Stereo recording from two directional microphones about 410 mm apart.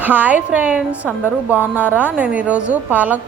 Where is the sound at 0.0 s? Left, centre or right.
Centre.